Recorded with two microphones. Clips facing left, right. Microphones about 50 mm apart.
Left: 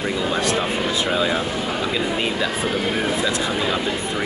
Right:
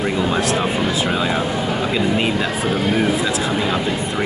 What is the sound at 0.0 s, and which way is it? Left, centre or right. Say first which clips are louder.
Speech: right 3 dB; centre.